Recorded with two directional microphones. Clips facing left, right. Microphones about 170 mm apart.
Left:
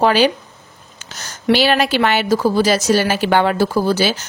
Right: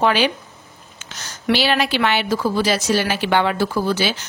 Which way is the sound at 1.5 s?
45° left (ahead or behind).